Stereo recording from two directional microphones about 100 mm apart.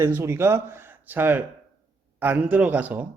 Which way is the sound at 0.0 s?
25° right (ahead or behind).